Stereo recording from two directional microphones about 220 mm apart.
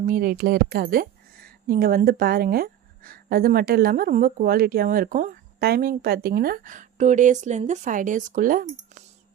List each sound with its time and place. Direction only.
0.0 s a woman's voice: 40° right (ahead or behind)